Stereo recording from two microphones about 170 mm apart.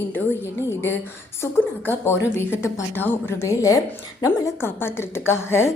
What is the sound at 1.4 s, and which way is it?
A woman's voice, 15° left (ahead or behind).